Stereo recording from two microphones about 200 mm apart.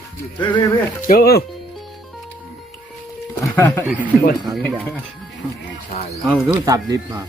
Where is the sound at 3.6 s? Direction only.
15° left (ahead or behind).